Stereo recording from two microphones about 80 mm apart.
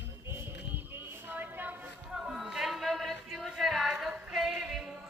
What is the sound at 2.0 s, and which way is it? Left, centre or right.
Music, centre.